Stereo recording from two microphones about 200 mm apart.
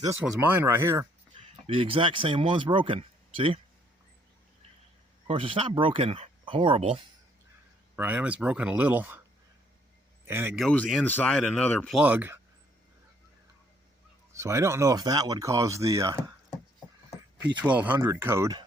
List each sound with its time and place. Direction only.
0.0 s speech: 10° right (ahead or behind)
1.6 s speech: 25° right (ahead or behind)
5.3 s speech: 30° right (ahead or behind)
7.9 s speech: 10° right (ahead or behind)
10.2 s speech: 10° right (ahead or behind)
10.6 s speech: centre (ahead or behind)
11.9 s speech: 10° right (ahead or behind)
14.3 s speech: 15° right (ahead or behind)
17.6 s speech: 10° right (ahead or behind)